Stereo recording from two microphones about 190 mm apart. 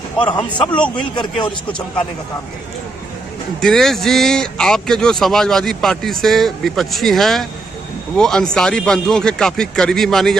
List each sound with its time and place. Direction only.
0.3 s a man's voice: 25° left (ahead or behind)
0.7 s speech: 5° left (ahead or behind)
1.4 s a man's voice: 25° left (ahead or behind)
3.6 s speech: 5° left (ahead or behind)